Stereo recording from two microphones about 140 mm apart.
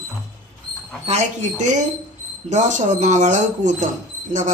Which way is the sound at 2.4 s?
60° right (ahead or behind).